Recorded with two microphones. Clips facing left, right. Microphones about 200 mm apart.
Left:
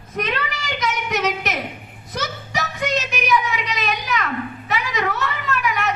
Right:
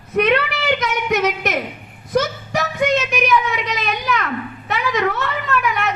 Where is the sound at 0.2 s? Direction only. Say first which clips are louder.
Right 8 dB; 65° right (ahead or behind).